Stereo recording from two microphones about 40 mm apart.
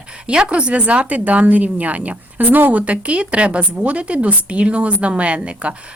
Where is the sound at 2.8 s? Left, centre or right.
Right.